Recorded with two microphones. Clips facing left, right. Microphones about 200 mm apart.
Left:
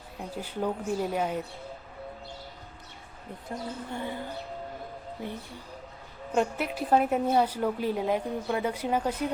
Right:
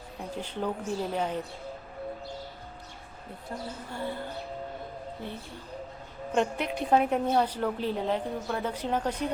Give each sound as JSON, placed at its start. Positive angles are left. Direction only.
{"t": 0.2, "sound": "a woman's voice", "side_deg": 10}
{"t": 3.9, "sound": "a woman's voice", "side_deg": 15}
{"t": 6.3, "sound": "a woman's voice", "side_deg": 5}